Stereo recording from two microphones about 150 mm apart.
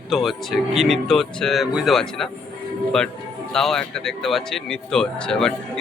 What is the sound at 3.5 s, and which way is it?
Speech, 5° left (ahead or behind).